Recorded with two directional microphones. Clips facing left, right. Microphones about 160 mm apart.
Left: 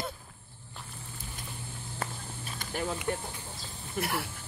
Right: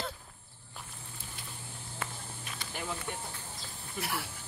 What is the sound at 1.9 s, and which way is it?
Walk, 35° left (ahead or behind).